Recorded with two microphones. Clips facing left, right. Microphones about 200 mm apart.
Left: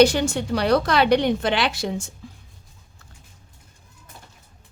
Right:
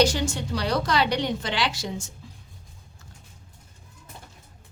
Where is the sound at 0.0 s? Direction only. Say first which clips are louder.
Left 6 dB; 55° left (ahead or behind).